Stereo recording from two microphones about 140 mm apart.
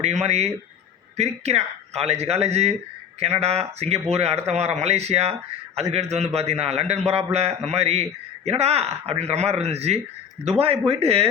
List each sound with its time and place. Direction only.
0.0 s speech: 50° right (ahead or behind)